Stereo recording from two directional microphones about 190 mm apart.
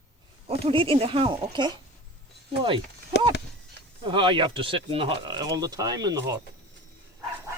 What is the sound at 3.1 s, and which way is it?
Speech, 60° left (ahead or behind).